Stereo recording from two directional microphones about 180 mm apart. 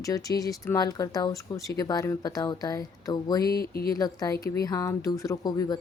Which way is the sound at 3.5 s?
55° left (ahead or behind).